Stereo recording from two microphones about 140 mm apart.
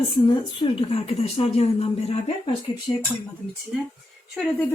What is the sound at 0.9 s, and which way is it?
A woman's voice, 45° left (ahead or behind).